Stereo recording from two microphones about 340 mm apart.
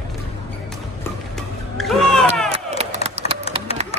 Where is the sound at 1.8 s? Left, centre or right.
Centre.